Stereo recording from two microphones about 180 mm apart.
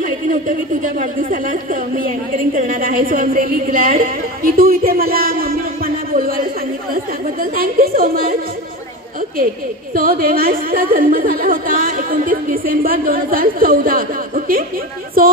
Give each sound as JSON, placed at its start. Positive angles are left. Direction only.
{"t": 0.0, "sound": "speech", "side_deg": -50}
{"t": 9.9, "sound": "speech", "side_deg": -55}